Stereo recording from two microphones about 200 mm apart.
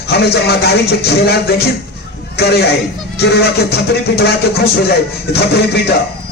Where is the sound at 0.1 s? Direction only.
55° left (ahead or behind).